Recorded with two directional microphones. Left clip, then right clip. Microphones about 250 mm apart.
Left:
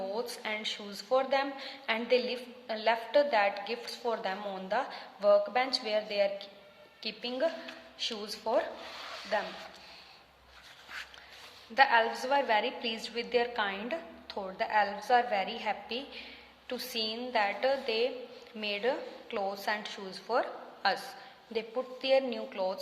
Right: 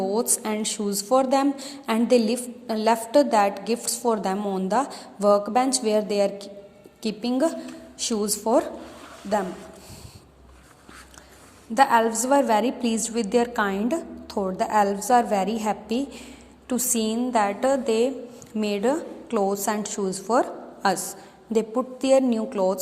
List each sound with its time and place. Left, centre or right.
0.0 s a woman's voice: centre
11.7 s a woman's voice: centre